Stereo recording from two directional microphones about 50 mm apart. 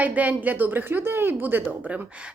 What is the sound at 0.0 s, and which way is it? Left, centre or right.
A woman's voice, right.